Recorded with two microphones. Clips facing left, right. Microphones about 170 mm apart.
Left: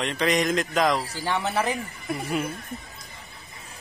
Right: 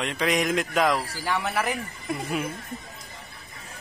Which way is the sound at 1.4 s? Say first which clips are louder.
Left 2 dB; 20° left (ahead or behind).